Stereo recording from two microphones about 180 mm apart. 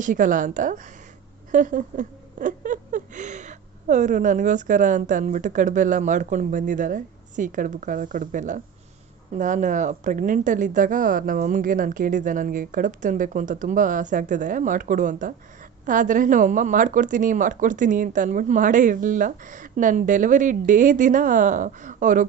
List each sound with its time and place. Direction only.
0.0 s speech: 45° right (ahead or behind)